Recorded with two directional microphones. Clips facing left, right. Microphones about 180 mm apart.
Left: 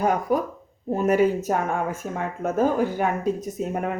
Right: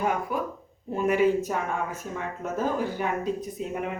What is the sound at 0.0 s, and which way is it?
Speech, 40° left (ahead or behind).